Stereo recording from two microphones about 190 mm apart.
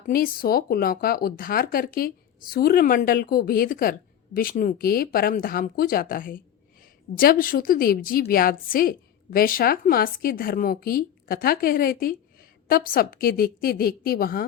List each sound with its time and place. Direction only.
0.1 s a woman's voice: 50° left (ahead or behind)